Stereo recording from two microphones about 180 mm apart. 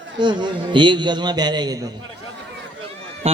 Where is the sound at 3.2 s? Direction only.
35° right (ahead or behind).